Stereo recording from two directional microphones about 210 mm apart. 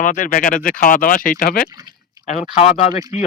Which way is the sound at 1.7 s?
20° right (ahead or behind).